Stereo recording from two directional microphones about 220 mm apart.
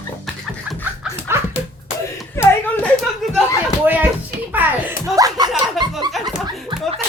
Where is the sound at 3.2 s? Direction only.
Centre (ahead or behind).